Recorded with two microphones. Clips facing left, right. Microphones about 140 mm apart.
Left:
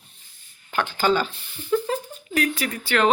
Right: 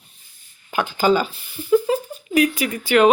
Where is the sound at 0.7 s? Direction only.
10° right (ahead or behind).